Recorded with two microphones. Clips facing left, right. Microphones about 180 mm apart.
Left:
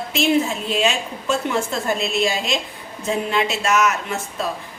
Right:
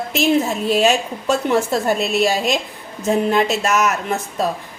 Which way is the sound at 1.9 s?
5° right (ahead or behind).